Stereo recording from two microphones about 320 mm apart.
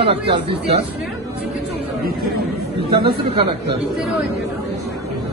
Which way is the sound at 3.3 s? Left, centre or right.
Centre.